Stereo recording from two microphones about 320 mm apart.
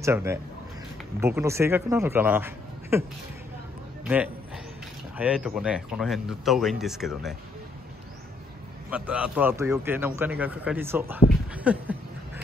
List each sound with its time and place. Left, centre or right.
0.0 s a man's voice: centre
5.1 s a man's voice: centre
8.9 s a man's voice: centre